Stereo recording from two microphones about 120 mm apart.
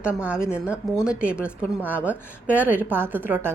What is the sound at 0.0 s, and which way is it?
Speech, 10° right (ahead or behind).